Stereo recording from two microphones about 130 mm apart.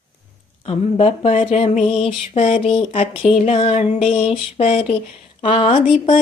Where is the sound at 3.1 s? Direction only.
60° left (ahead or behind).